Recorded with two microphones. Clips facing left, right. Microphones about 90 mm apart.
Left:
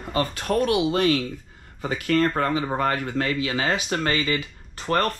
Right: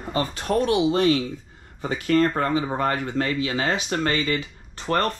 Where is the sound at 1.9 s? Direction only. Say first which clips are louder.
Right 1 dB; 35° right (ahead or behind).